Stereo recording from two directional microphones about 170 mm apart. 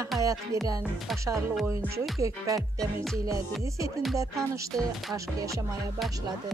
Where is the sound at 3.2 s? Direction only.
20° right (ahead or behind).